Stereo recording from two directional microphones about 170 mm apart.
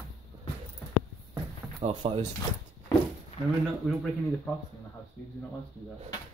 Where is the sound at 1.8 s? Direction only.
30° right (ahead or behind).